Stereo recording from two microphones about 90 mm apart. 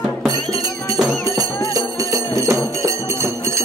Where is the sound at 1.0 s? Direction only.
45° right (ahead or behind).